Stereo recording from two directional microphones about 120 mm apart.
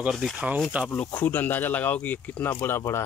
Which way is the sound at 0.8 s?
10° left (ahead or behind).